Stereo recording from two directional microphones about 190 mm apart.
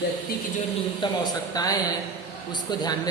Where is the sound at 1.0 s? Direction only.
25° left (ahead or behind).